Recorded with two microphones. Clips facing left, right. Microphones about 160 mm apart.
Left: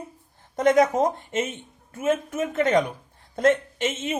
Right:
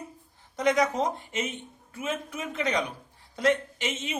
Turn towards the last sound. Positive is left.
turn(degrees=50)  # may be behind; listen again after turning